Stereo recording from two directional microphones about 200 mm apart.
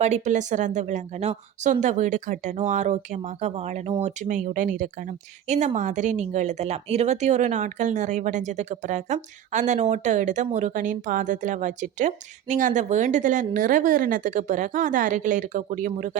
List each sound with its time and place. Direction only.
0.0 s speech: 35° right (ahead or behind)